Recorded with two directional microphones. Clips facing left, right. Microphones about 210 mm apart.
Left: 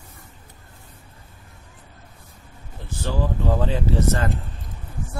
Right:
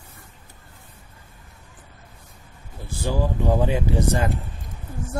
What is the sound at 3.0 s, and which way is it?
Speech, 10° right (ahead or behind).